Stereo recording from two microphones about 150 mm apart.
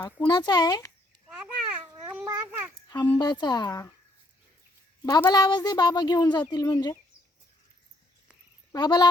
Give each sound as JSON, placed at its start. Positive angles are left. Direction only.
{"t": 0.3, "sound": "a woman's voice", "side_deg": 30}
{"t": 1.4, "sound": "babbling", "side_deg": -5}
{"t": 2.0, "sound": "a sound", "side_deg": -15}
{"t": 3.2, "sound": "a woman's voice", "side_deg": 30}
{"t": 5.0, "sound": "a woman's voice", "side_deg": 25}
{"t": 8.7, "sound": "a woman's voice", "side_deg": 25}